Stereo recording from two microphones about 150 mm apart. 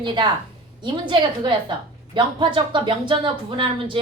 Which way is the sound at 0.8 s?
30° right (ahead or behind).